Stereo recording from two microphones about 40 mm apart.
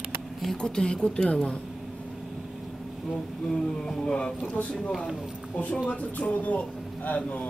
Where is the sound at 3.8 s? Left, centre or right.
Centre.